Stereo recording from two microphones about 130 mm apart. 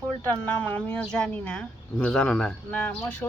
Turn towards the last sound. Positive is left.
turn(degrees=15)  # may be behind; listen again after turning